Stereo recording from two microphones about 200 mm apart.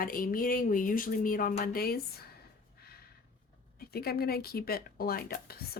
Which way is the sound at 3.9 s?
50° left (ahead or behind).